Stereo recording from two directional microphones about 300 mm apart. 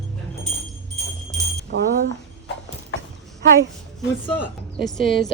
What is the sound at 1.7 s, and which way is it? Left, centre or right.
Speech, right.